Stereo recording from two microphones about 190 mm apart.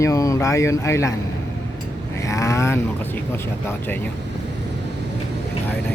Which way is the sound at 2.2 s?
15° left (ahead or behind).